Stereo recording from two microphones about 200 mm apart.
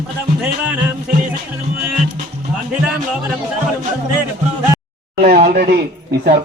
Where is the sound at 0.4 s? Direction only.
5° right (ahead or behind).